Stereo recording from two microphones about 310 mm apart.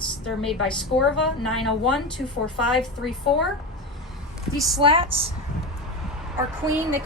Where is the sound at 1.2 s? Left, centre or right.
Centre.